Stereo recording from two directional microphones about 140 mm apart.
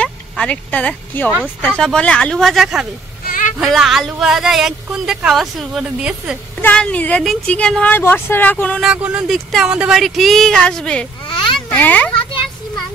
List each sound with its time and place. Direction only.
0.0 s speech: 10° left (ahead or behind)
3.3 s vehicle: 75° left (ahead or behind)
3.5 s speech: centre (ahead or behind)
6.6 s speech: 10° left (ahead or behind)
8.8 s a child's voice: 10° right (ahead or behind); by 12.1 s 10° left (ahead or behind)